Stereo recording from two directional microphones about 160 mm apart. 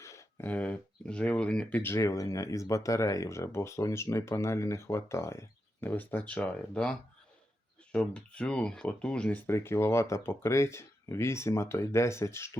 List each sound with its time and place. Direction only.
0.0 s speech: 20° left (ahead or behind)
7.9 s speech: 5° left (ahead or behind)